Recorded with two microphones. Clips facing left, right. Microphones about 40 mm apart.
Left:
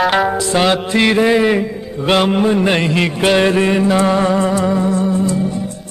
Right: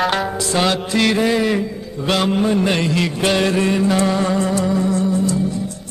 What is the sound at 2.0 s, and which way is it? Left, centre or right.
Mantra, left.